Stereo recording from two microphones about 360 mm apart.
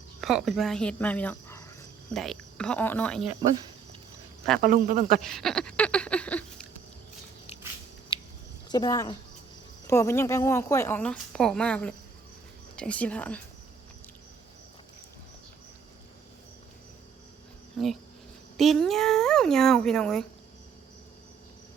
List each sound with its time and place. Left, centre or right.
0.2 s speech: centre
4.6 s speech: right
5.2 s a sound: centre
8.1 s a sound: centre
8.7 s a woman's voice: centre
18.5 s speech: centre